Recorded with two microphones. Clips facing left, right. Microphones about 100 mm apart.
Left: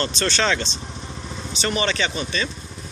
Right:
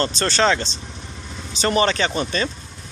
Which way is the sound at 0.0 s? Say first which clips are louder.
Right 3 dB; 35° right (ahead or behind).